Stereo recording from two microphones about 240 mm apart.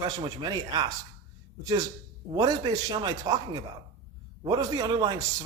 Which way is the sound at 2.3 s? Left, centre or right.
Centre.